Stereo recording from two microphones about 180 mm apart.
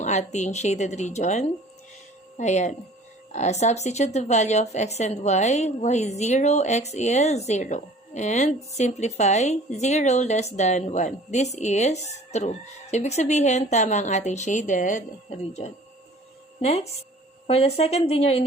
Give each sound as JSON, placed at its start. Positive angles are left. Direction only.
{"t": 0.0, "sound": "speech", "side_deg": 40}